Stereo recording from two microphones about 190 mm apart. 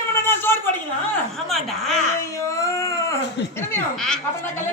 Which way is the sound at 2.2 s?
15° left (ahead or behind).